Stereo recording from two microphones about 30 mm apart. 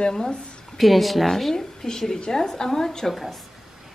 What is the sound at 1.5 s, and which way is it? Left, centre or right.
A woman's voice, centre.